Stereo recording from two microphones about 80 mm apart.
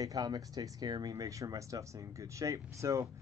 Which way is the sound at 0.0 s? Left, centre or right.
Right.